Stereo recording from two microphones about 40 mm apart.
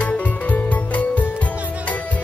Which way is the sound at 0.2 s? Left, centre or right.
Left.